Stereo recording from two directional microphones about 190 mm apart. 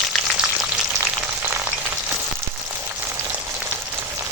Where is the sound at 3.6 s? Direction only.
10° right (ahead or behind).